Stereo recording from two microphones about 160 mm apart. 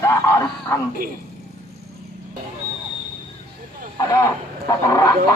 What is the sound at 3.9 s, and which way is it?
Speech, 20° left (ahead or behind).